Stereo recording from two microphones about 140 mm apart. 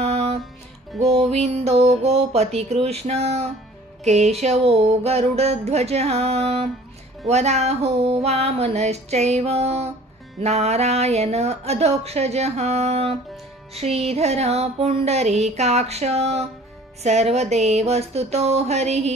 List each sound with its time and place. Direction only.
0.0 s music: 50° right (ahead or behind)
0.9 s speech: 50° right (ahead or behind)